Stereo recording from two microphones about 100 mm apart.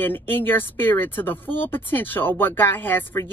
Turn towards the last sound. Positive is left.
turn(degrees=20)  # may be behind; listen again after turning